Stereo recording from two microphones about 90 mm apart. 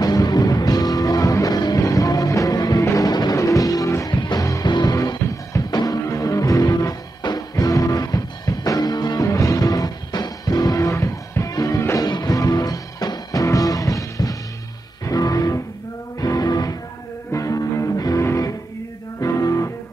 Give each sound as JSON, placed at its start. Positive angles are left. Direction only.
{"t": 0.0, "sound": "music", "side_deg": 45}
{"t": 3.1, "sound": "music", "side_deg": 50}
{"t": 3.3, "sound": "music", "side_deg": 40}
{"t": 4.1, "sound": "music", "side_deg": 55}
{"t": 4.4, "sound": "music", "side_deg": 40}
{"t": 4.6, "sound": "music", "side_deg": 55}
{"t": 5.2, "sound": "music", "side_deg": 35}
{"t": 9.2, "sound": "music", "side_deg": 40}